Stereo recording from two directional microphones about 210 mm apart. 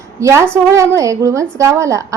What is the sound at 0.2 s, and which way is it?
A woman's voice, 15° right (ahead or behind).